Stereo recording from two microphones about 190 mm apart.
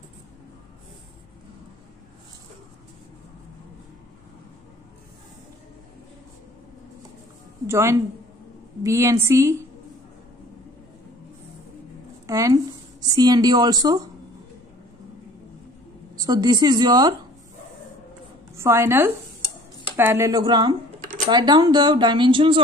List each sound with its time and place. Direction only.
7.6 s a woman's voice: 15° right (ahead or behind)
12.3 s speech: 15° right (ahead or behind)
16.2 s speech: 20° right (ahead or behind)
18.6 s a woman's voice: 15° right (ahead or behind)